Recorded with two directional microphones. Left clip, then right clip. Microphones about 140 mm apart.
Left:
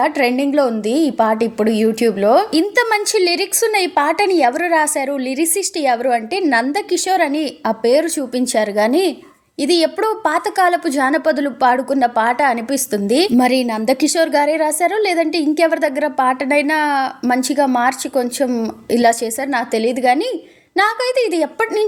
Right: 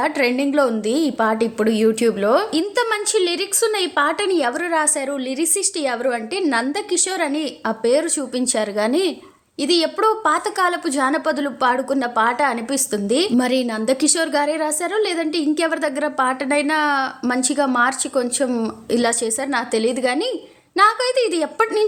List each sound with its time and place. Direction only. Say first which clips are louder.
0.0 s a woman's voice: left 3 dB; 20° left (ahead or behind)